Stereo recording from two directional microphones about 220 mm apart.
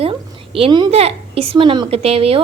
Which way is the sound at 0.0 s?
25° right (ahead or behind).